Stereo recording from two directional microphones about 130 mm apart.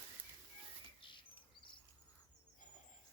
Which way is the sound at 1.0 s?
40° left (ahead or behind).